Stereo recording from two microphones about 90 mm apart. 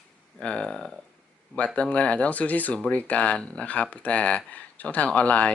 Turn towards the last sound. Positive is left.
turn(degrees=15)  # may be behind; listen again after turning